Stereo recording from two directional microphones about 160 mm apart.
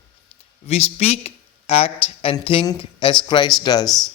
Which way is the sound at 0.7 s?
40° left (ahead or behind).